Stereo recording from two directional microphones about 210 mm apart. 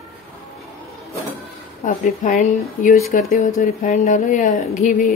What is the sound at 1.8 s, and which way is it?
Speech, 40° left (ahead or behind).